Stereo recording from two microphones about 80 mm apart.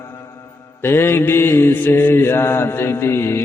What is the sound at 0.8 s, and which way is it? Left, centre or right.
Mantra, left.